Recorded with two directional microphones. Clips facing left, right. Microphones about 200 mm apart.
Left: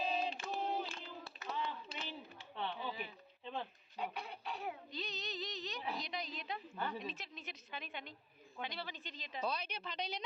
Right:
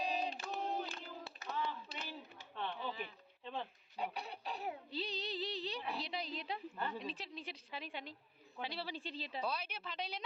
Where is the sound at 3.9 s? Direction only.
35° right (ahead or behind).